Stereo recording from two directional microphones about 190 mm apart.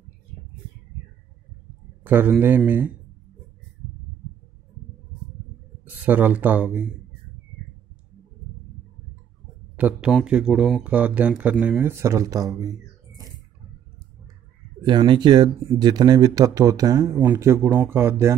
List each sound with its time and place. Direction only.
2.0 s speech: 10° right (ahead or behind)
5.9 s speech: 10° right (ahead or behind)
9.8 s speech: 5° right (ahead or behind)
14.8 s speech: 25° right (ahead or behind)